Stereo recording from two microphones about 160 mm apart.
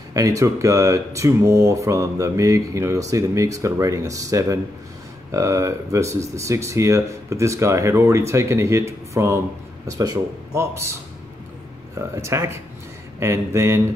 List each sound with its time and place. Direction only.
0.1 s speech: 20° right (ahead or behind)
12.2 s speech: 15° right (ahead or behind)